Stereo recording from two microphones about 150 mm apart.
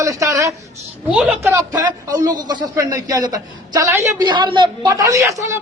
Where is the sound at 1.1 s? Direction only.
5° right (ahead or behind).